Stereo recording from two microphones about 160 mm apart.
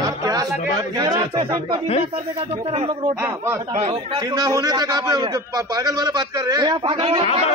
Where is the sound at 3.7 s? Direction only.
45° right (ahead or behind).